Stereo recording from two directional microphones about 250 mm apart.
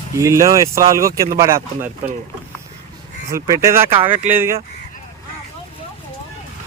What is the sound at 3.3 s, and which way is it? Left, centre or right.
Speech, centre.